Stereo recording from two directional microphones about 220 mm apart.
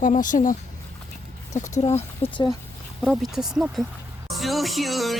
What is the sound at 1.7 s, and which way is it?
Speech, 30° left (ahead or behind).